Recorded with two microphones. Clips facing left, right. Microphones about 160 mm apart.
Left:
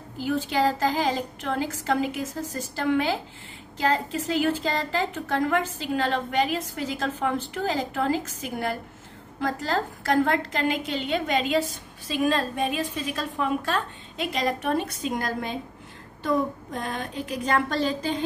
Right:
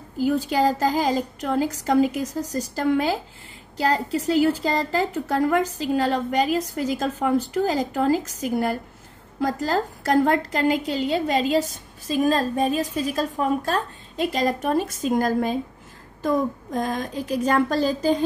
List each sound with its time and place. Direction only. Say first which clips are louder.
0.2 s a woman's voice: right 4 dB; 40° right (ahead or behind)